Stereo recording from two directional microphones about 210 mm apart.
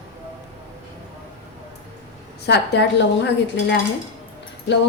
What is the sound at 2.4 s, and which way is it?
Speech, 55° left (ahead or behind).